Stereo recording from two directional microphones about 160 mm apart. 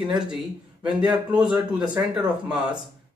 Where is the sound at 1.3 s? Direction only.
25° right (ahead or behind).